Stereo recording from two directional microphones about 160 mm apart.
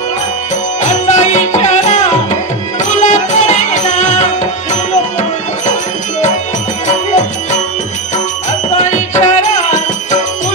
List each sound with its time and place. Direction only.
1.0 s music: 50° left (ahead or behind)
8.7 s music: 45° left (ahead or behind)